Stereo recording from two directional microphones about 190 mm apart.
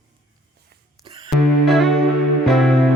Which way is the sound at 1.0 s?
25° right (ahead or behind).